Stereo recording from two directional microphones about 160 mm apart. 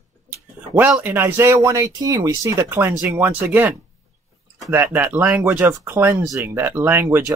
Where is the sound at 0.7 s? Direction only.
10° right (ahead or behind).